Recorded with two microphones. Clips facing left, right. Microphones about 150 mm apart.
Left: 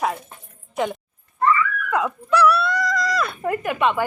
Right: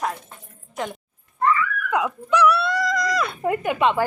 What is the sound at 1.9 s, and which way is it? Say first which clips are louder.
Dog: right 1 dB; 15° right (ahead or behind).